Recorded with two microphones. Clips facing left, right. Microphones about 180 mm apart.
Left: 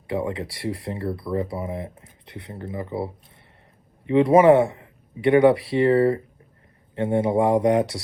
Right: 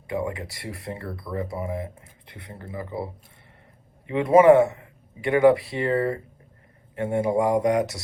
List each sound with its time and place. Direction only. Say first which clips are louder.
0.1 s a man's voice: left 2 dB; 25° left (ahead or behind)